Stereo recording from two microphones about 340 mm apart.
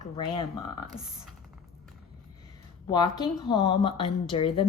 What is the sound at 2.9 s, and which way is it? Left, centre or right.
A woman's voice, centre.